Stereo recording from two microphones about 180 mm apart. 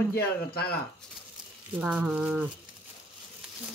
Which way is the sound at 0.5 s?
60° left (ahead or behind).